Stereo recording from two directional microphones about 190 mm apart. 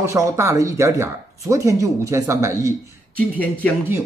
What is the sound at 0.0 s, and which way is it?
Speech, 15° right (ahead or behind).